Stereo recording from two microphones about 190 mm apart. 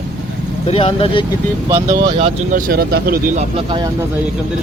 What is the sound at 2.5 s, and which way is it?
Speech, 45° right (ahead or behind).